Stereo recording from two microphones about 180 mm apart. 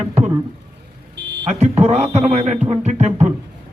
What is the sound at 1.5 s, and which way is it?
A man's voice, 40° right (ahead or behind).